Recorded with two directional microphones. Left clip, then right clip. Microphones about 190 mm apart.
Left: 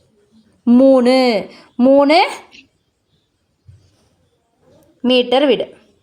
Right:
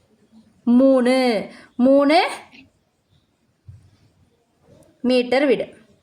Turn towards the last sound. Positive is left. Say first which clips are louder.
# left 5 dB
turn(degrees=20)  # may be behind; listen again after turning